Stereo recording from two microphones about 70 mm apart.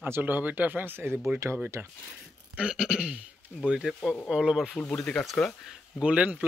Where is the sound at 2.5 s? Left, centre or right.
Centre.